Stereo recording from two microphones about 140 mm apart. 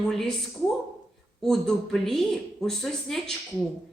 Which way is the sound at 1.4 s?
5° left (ahead or behind).